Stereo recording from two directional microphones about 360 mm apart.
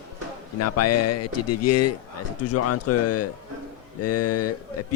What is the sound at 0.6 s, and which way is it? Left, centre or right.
A man's voice, left.